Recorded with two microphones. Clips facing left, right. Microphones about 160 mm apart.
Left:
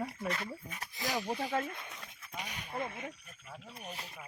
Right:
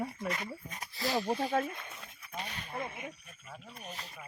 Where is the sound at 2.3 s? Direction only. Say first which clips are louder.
Right 2 dB; 10° left (ahead or behind).